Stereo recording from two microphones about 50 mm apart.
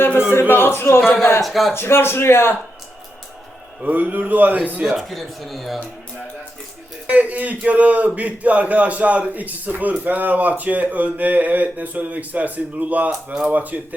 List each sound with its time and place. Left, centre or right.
0.3 s speech: left
1.5 s speech: centre
1.7 s a man's voice: left
3.8 s a man's voice: right
4.9 s speech: centre
7.1 s a man's voice: right